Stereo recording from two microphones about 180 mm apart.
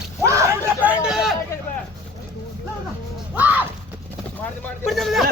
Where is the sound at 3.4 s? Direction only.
10° right (ahead or behind).